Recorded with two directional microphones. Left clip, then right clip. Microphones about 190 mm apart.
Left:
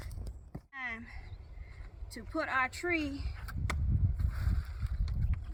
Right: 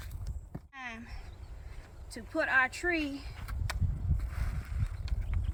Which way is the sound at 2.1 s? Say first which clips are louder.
Right 5 dB; 10° right (ahead or behind).